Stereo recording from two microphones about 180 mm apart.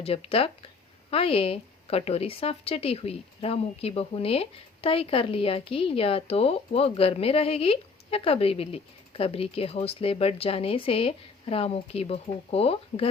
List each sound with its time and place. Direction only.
0.0 s a woman's voice: 30° left (ahead or behind)